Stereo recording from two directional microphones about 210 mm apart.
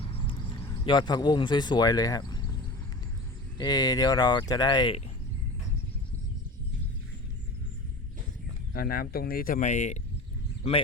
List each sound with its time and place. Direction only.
0.9 s speech: 20° left (ahead or behind)
3.6 s speech: 20° left (ahead or behind)
8.7 s speech: 45° left (ahead or behind)